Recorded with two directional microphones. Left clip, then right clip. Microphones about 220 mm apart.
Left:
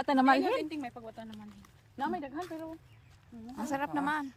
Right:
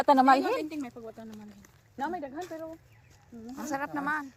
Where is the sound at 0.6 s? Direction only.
Centre (ahead or behind).